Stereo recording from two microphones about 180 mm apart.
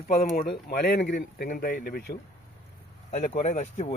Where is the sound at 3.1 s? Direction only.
40° left (ahead or behind).